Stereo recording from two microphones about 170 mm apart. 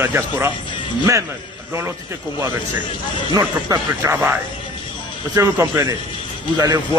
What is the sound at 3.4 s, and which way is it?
A man's voice, 20° right (ahead or behind).